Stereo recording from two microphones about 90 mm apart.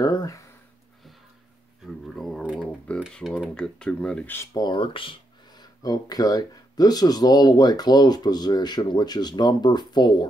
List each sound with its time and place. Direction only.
0.0 s speech: 45° left (ahead or behind)
1.8 s a sound: centre (ahead or behind)
2.4 s a sound: 10° right (ahead or behind)
3.2 s speech: 15° left (ahead or behind)
4.6 s speech: 60° left (ahead or behind)
5.6 s speech: 45° left (ahead or behind)